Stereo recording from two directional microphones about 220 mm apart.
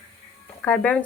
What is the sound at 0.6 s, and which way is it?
Speech, 5° left (ahead or behind).